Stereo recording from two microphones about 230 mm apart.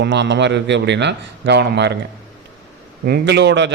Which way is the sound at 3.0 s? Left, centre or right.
Right.